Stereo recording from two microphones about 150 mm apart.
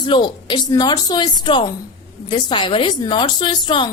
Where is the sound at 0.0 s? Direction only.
30° left (ahead or behind).